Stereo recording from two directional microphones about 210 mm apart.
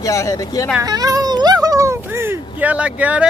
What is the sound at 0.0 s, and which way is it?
Speech, 15° left (ahead or behind).